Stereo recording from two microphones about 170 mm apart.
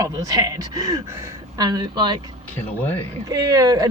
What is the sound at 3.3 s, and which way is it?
Speech, 20° right (ahead or behind).